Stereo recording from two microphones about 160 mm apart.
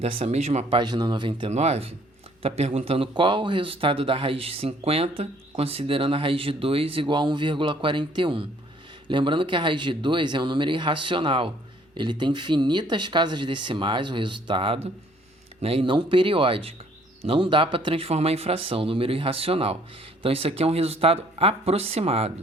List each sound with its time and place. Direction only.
0.0 s speech: 40° right (ahead or behind)
0.8 s speech: 30° right (ahead or behind)
1.5 s speech: 45° right (ahead or behind)